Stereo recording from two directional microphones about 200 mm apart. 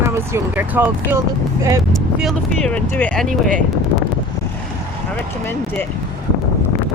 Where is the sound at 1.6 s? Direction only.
15° right (ahead or behind).